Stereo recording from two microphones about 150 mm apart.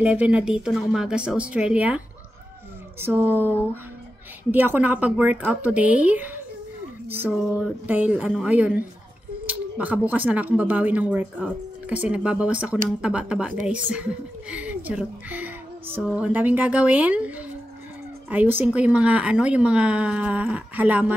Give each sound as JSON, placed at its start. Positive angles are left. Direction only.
{"t": 0.0, "sound": "speech", "side_deg": -10}
{"t": 3.0, "sound": "speech", "side_deg": -15}
{"t": 7.5, "sound": "speech", "side_deg": -10}